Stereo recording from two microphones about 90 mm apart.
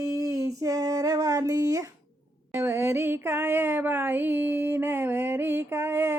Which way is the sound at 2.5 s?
25° right (ahead or behind).